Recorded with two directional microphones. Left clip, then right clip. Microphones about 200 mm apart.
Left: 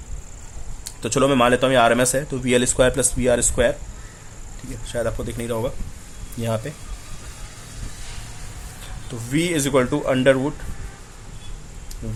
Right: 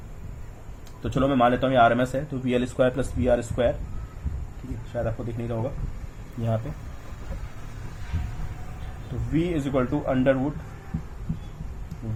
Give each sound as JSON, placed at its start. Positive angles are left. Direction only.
{"t": 1.0, "sound": "a man's voice", "side_deg": 40}
{"t": 4.9, "sound": "speech", "side_deg": 50}
{"t": 9.3, "sound": "speech", "side_deg": 50}